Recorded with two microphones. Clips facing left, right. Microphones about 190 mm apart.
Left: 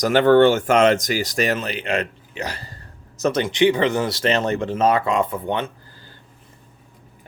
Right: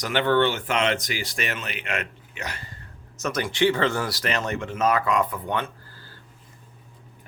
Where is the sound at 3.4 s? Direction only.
20° left (ahead or behind).